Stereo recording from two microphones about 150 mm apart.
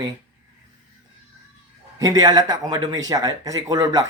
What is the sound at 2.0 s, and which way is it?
Speech, 25° right (ahead or behind).